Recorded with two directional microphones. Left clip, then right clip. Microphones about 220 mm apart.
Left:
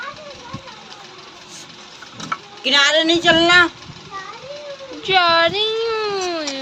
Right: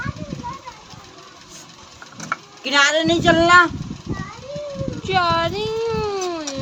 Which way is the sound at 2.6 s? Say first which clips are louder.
Left 2 dB; 45° right (ahead or behind).